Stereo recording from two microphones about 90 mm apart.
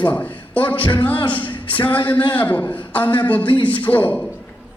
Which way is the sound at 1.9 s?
65° left (ahead or behind).